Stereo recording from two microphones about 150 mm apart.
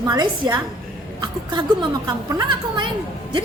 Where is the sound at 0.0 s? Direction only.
30° right (ahead or behind).